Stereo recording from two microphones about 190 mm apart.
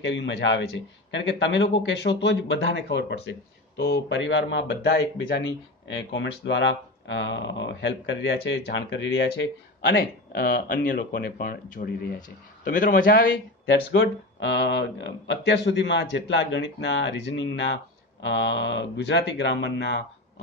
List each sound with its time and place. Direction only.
0.0 s a man's voice: 70° left (ahead or behind); by 13.4 s 50° left (ahead or behind)
13.7 s a man's voice: 75° left (ahead or behind)